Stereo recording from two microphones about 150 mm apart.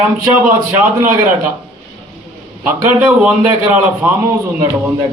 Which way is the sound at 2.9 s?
10° right (ahead or behind).